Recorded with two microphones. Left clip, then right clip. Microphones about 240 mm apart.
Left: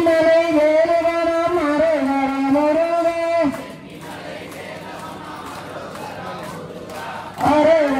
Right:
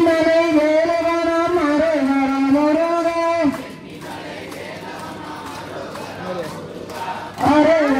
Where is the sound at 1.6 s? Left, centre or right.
Left.